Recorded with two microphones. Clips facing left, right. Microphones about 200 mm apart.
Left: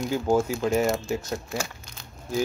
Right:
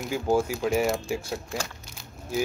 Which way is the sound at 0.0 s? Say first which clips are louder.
Left 2 dB; 5° right (ahead or behind).